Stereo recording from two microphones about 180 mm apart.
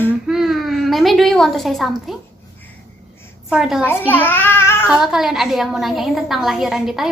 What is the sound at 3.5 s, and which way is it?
Speech, 5° right (ahead or behind).